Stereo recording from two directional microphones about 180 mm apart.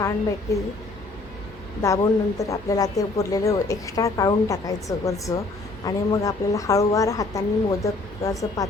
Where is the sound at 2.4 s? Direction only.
20° left (ahead or behind).